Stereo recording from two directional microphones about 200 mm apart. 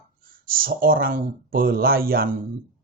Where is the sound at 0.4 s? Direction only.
45° right (ahead or behind).